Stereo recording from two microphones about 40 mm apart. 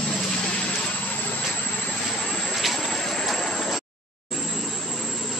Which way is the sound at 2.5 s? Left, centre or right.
Centre.